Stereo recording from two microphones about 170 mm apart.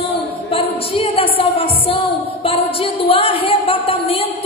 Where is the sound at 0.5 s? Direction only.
35° left (ahead or behind).